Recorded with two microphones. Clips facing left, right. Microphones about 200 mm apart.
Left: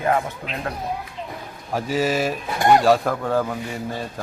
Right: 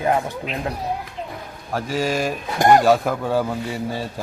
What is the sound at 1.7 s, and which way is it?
A man's voice, 5° left (ahead or behind).